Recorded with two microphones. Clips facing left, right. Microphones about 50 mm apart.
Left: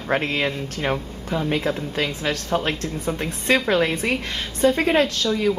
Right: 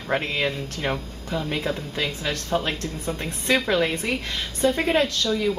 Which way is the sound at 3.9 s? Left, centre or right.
Left.